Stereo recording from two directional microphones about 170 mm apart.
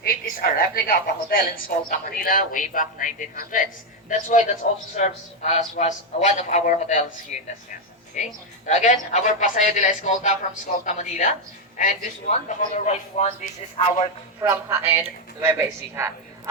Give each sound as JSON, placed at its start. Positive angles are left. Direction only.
{"t": 0.0, "sound": "a woman's voice", "side_deg": 60}
{"t": 8.1, "sound": "a woman's voice", "side_deg": 45}
{"t": 14.4, "sound": "speech", "side_deg": -15}